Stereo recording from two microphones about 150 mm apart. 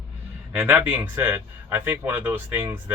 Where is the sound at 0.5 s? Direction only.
10° right (ahead or behind).